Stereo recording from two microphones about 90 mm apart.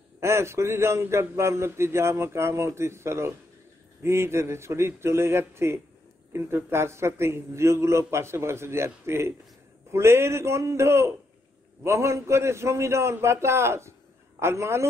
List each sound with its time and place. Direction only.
0.2 s a man's voice: 30° right (ahead or behind)